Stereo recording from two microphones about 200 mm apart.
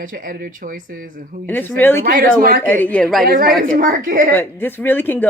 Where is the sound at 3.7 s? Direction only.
45° right (ahead or behind).